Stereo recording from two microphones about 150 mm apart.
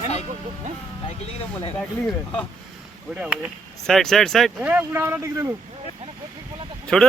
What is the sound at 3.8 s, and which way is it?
Speech, 5° left (ahead or behind).